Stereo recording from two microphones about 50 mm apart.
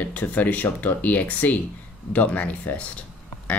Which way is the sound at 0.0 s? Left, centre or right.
Left.